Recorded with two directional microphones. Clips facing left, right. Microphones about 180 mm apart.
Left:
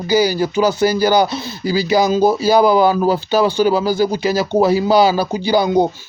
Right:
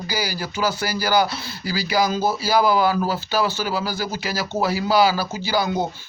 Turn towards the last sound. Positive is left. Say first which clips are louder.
# left 8 dB
turn(degrees=20)  # may be behind; listen again after turning